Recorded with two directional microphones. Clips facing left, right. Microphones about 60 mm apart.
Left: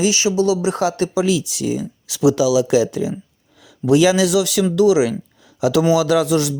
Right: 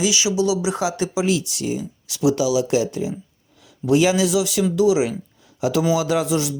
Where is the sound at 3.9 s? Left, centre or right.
Left.